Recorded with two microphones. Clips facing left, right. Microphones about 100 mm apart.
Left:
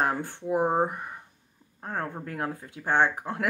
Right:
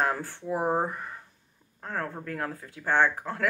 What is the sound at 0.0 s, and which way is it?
Speech, 20° left (ahead or behind).